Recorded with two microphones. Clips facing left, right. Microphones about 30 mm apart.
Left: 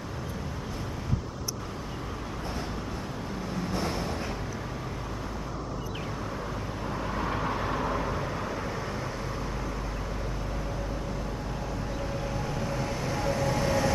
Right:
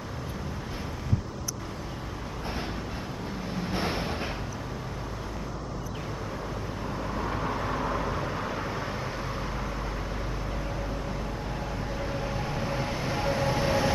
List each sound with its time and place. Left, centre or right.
3.5 s vehicle: right
7.0 s vehicle: centre
12.1 s train: centre